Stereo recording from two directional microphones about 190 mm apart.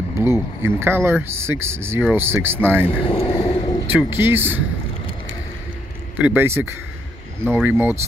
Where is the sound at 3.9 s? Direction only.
10° right (ahead or behind).